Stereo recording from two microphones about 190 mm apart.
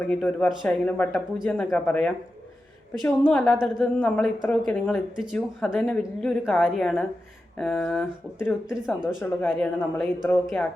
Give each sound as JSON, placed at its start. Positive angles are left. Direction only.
{"t": 0.0, "sound": "a woman's voice", "side_deg": 5}